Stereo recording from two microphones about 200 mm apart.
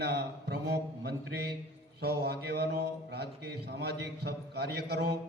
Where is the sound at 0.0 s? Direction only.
55° right (ahead or behind).